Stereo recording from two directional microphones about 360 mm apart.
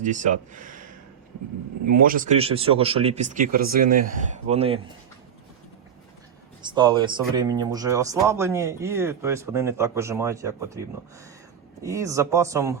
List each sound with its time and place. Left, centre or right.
0.0 s speech: right
2.0 s speech: right
6.6 s speech: centre